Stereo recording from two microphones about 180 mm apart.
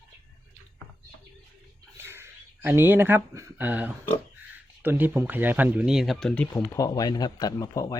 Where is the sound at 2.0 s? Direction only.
15° right (ahead or behind).